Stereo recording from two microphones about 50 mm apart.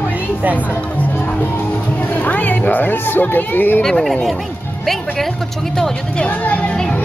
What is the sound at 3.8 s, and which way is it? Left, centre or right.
A woman's voice, centre.